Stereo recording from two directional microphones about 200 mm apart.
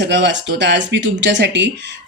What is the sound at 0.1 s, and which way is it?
Speech, 60° right (ahead or behind).